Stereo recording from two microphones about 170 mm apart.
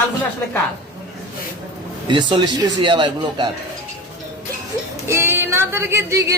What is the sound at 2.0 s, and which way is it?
A woman's voice, 30° right (ahead or behind).